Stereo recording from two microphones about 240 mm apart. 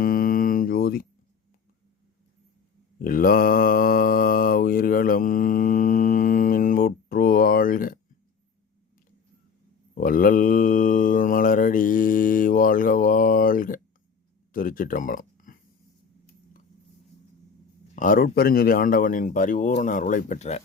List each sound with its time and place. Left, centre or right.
0.0 s music: left
3.0 s mantra: left
9.9 s mantra: left
14.5 s a sound: left
17.9 s speech: left